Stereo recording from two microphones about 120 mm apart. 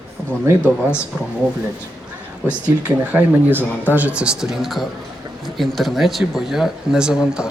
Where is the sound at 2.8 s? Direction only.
15° right (ahead or behind).